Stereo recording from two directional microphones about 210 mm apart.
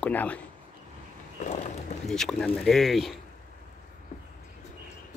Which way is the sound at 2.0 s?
Centre (ahead or behind).